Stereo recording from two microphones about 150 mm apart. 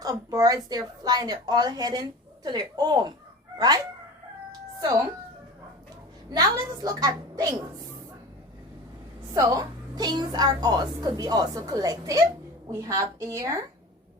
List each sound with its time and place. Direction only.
0.0 s a woman's voice: 25° right (ahead or behind)
6.3 s a woman's voice: 25° right (ahead or behind)
9.3 s a woman's voice: 20° right (ahead or behind)